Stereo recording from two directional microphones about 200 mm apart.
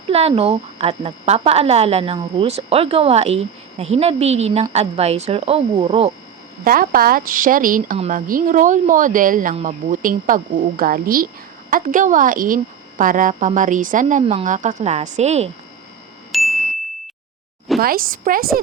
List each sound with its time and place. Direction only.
0.1 s a woman's voice: 30° right (ahead or behind)
6.7 s a woman's voice: 45° right (ahead or behind)
16.3 s ding: centre (ahead or behind)
17.7 s speech: 45° right (ahead or behind)